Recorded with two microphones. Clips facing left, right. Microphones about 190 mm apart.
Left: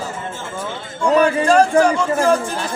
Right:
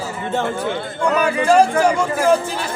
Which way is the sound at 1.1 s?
30° left (ahead or behind).